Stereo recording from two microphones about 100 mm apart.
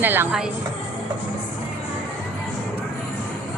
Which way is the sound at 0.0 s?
20° right (ahead or behind).